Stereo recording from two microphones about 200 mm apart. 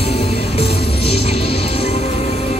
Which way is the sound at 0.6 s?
30° left (ahead or behind).